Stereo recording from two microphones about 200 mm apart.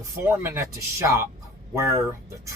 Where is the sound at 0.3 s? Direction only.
15° right (ahead or behind).